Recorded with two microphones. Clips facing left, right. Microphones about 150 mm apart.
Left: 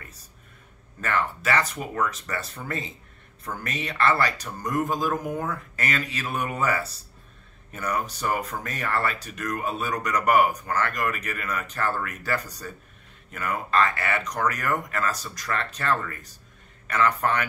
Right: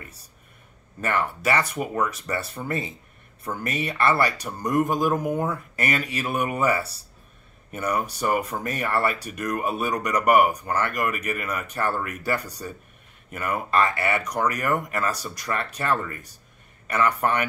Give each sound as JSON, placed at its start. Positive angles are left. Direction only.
{"t": 1.0, "sound": "speech", "side_deg": -15}